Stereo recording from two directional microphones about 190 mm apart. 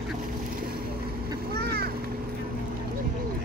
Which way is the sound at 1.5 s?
55° right (ahead or behind).